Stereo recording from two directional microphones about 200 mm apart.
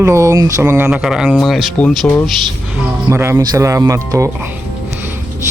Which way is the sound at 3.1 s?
15° right (ahead or behind).